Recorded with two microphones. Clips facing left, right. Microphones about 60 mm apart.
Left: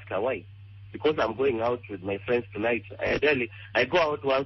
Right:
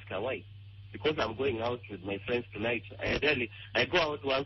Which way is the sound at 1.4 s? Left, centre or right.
Left.